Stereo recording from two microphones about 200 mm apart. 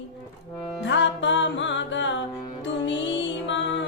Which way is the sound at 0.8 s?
65° left (ahead or behind).